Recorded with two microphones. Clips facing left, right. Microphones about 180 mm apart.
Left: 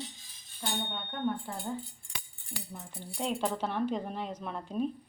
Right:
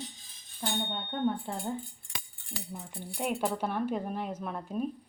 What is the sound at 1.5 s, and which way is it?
Speech, 25° right (ahead or behind).